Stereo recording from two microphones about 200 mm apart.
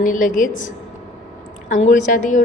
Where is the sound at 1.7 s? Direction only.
40° left (ahead or behind).